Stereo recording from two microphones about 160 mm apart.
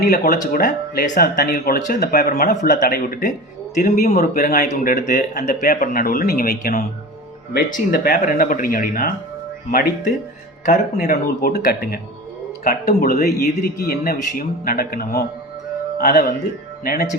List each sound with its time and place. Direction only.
0.0 s speech: 65° left (ahead or behind)
10.7 s a man's voice: 60° left (ahead or behind)